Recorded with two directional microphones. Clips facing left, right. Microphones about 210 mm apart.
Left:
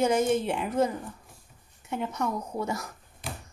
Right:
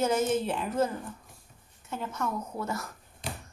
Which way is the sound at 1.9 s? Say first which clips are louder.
Left 3 dB; 15° left (ahead or behind).